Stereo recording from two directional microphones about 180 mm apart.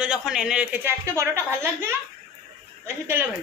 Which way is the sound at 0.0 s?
5° right (ahead or behind).